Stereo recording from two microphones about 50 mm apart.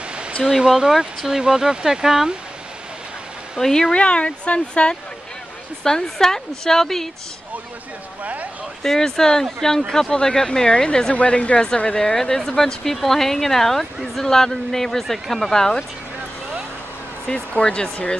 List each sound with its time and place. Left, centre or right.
0.4 s speech: centre
3.5 s speech: centre
3.9 s speech: left
5.9 s speech: centre
8.2 s speech: right
8.8 s speech: centre
17.3 s speech: centre